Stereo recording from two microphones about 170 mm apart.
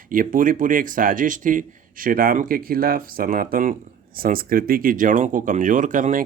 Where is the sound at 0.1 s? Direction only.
55° right (ahead or behind).